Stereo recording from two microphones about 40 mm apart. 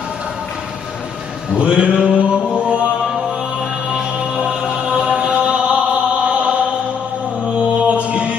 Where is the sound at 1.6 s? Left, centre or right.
Right.